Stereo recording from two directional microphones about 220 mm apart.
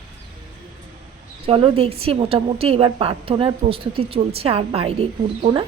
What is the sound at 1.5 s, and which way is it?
A woman's voice, 25° right (ahead or behind).